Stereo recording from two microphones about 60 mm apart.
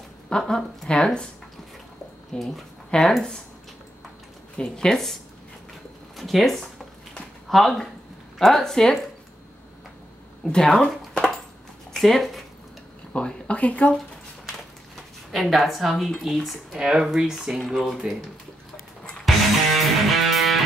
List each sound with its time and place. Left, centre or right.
0.3 s a woman's voice: centre
0.8 s speech: centre
2.3 s speech: centre
4.6 s speech: centre
6.1 s a woman's voice: centre
10.4 s speech: centre
11.9 s speech: centre
13.1 s speech: left
15.3 s a woman's voice: centre
16.7 s speech: centre
19.2 s music: centre